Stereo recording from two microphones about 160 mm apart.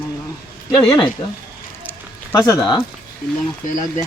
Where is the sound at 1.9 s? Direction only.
20° left (ahead or behind).